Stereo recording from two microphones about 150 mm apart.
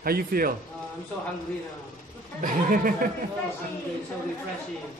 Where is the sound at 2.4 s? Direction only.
65° right (ahead or behind).